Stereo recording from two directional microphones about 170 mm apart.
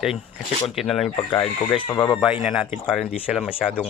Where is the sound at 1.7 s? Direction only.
30° left (ahead or behind).